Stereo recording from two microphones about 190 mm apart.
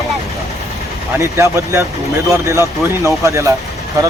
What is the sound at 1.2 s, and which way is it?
Speech, 15° right (ahead or behind).